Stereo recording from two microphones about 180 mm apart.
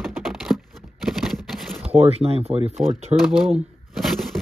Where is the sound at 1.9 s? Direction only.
35° right (ahead or behind).